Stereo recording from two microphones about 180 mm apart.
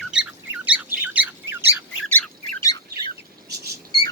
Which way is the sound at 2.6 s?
20° left (ahead or behind).